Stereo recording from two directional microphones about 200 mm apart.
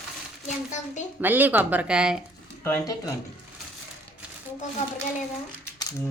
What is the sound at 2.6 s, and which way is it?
Speech, 15° left (ahead or behind).